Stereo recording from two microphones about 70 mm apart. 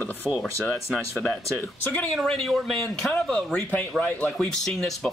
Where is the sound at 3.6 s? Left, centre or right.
Left.